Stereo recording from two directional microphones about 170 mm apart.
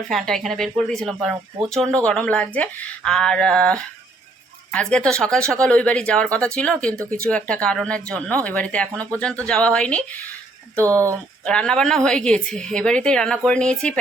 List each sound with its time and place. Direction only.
0.1 s a woman's voice: centre (ahead or behind)
10.8 s speech: 20° right (ahead or behind)
11.4 s a woman's voice: 5° left (ahead or behind)